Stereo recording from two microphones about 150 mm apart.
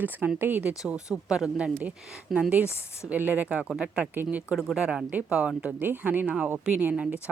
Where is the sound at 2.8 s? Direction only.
15° left (ahead or behind).